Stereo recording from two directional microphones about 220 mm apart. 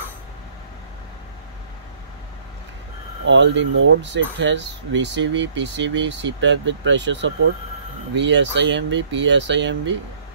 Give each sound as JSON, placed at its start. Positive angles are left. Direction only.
{"t": 3.3, "sound": "speech", "side_deg": -55}